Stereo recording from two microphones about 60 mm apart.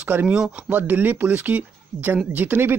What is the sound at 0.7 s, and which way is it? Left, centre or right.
Speech, right.